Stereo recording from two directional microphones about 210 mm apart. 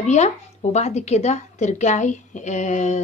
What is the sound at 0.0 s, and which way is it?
Speech, 35° left (ahead or behind).